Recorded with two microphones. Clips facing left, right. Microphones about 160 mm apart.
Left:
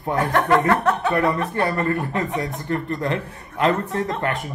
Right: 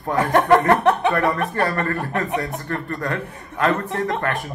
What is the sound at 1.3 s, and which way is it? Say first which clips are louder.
A man's voice: even; 20° left (ahead or behind).